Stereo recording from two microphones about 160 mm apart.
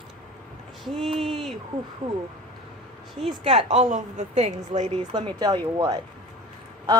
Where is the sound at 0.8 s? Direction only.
Centre (ahead or behind).